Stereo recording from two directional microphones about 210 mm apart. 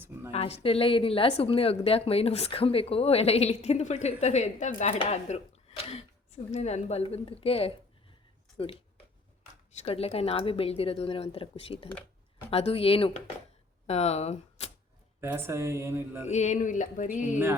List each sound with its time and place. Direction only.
0.0 s a sound: 10° right (ahead or behind)
0.3 s a woman's voice: 30° left (ahead or behind)
9.8 s a woman's voice: 25° left (ahead or behind)
11.9 s a sound: 10° left (ahead or behind)
12.5 s a woman's voice: 30° left (ahead or behind)
15.2 s speech: 10° right (ahead or behind)
16.3 s speech: 35° left (ahead or behind)